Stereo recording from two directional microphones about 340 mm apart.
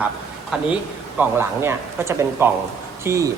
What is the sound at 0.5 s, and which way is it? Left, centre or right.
A man's voice, centre.